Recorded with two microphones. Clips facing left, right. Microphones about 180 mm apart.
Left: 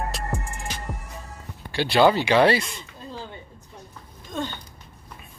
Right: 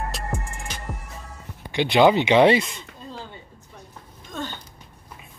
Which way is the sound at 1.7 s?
20° right (ahead or behind).